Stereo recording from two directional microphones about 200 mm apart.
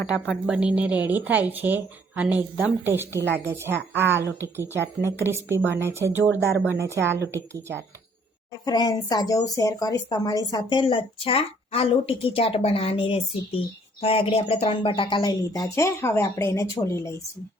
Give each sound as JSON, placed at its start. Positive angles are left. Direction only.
{"t": 0.3, "sound": "speech", "side_deg": -5}
{"t": 6.2, "sound": "speech", "side_deg": 10}
{"t": 6.7, "sound": "speech", "side_deg": -15}
{"t": 8.6, "sound": "speech", "side_deg": 20}